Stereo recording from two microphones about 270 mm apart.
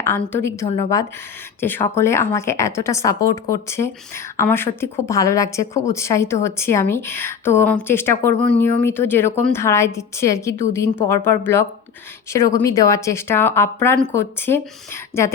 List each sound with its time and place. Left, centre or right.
0.0 s speech: centre
1.6 s speech: centre